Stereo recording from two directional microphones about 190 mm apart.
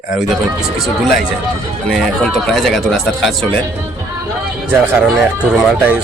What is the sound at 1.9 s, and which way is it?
Speech, centre (ahead or behind).